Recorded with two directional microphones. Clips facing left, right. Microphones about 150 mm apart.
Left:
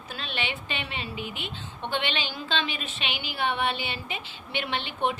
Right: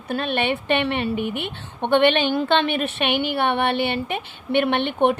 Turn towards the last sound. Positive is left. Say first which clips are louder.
# right 9 dB
turn(degrees=-60)  # may be behind; listen again after turning